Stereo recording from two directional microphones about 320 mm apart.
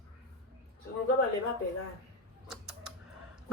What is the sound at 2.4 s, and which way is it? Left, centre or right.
Mechanisms, centre.